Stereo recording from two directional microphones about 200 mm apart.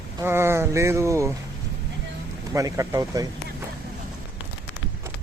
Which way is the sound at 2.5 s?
15° right (ahead or behind).